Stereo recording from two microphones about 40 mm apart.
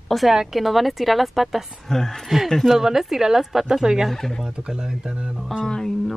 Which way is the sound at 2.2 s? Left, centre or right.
Centre.